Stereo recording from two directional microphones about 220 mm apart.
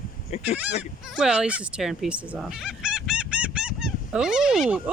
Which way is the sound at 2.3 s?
5° right (ahead or behind).